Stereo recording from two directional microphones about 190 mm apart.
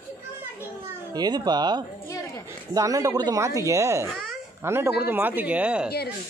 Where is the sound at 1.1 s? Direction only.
20° right (ahead or behind).